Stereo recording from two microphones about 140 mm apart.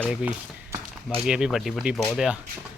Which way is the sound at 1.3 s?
5° right (ahead or behind).